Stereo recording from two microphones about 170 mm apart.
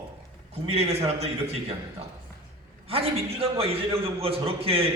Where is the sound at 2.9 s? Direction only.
35° right (ahead or behind).